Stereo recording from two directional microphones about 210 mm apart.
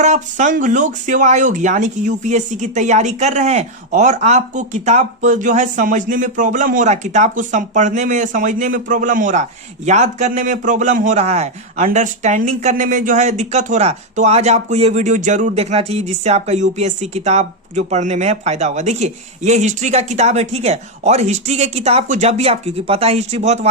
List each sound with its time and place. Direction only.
0.0 s speech: 35° right (ahead or behind)